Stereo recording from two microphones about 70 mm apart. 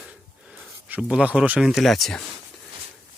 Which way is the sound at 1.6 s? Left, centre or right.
Centre.